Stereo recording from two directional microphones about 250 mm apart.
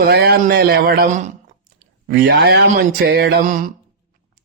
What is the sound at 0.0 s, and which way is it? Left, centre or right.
Speech, right.